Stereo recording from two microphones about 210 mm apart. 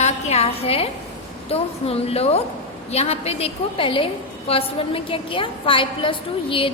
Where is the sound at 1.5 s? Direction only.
30° left (ahead or behind).